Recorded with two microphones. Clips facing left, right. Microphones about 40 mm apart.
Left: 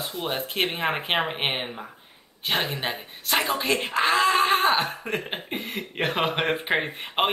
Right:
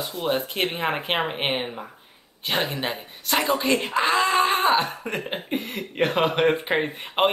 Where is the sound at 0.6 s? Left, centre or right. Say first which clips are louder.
Even; centre.